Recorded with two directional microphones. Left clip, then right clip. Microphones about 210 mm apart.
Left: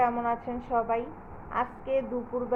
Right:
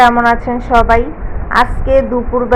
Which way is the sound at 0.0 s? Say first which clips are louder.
Right 18 dB; 15° right (ahead or behind).